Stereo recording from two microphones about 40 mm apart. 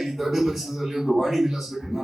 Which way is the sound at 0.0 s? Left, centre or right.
Centre.